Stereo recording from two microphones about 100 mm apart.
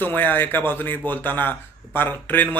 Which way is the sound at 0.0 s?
20° left (ahead or behind).